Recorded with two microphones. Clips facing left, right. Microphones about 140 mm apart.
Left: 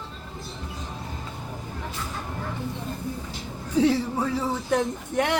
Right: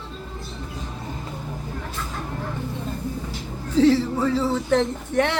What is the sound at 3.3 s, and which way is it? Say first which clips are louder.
Speech: right 3 dB; 15° left (ahead or behind).